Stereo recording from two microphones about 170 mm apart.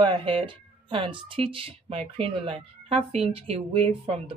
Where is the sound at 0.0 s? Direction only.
30° right (ahead or behind).